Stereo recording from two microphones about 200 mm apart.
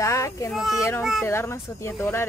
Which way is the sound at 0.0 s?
15° left (ahead or behind).